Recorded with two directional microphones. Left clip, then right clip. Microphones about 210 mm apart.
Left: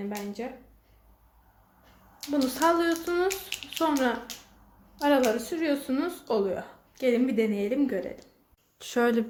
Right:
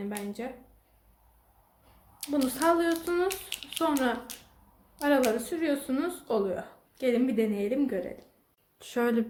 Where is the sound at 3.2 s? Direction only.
20° right (ahead or behind).